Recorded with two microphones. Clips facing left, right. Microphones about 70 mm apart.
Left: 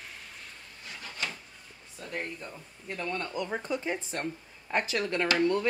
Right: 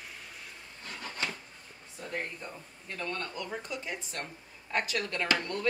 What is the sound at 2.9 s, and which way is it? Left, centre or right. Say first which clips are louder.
Speech: left 3 dB; centre.